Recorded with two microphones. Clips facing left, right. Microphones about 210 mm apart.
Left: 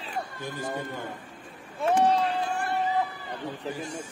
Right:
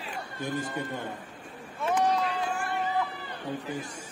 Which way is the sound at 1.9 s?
30° left (ahead or behind).